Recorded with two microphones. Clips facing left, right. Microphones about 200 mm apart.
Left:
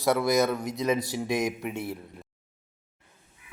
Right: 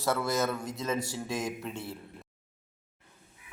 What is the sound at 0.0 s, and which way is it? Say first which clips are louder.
Speech: left 6 dB; 15° left (ahead or behind).